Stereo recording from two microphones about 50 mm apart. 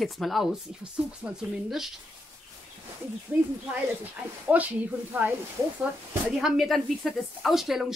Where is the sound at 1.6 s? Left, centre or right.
Centre.